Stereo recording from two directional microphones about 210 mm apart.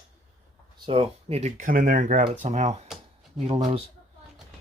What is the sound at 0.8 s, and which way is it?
Speech, 25° right (ahead or behind).